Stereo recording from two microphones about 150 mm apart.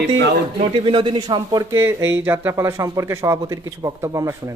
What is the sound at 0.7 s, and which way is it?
Speech, 35° right (ahead or behind).